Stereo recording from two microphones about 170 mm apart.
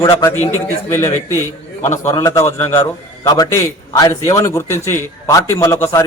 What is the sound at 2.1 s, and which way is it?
Speech, 20° left (ahead or behind).